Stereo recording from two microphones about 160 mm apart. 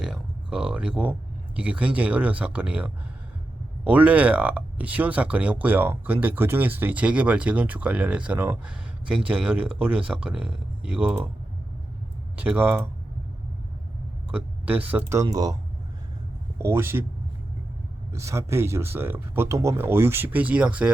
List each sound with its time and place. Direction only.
0.0 s a sound: 5° right (ahead or behind)
1.5 s speech: 10° right (ahead or behind)
12.4 s speech: 10° right (ahead or behind)
14.3 s speech: 10° right (ahead or behind)
15.2 s speech: 20° right (ahead or behind)
16.6 s speech: 15° right (ahead or behind)
18.1 s speech: 20° right (ahead or behind)